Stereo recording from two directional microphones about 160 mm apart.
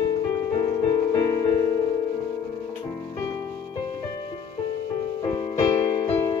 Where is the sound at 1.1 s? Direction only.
25° left (ahead or behind).